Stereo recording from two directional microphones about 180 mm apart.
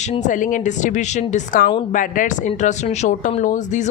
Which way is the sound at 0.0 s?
40° left (ahead or behind).